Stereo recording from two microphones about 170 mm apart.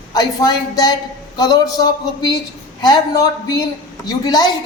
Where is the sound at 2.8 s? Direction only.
20° left (ahead or behind).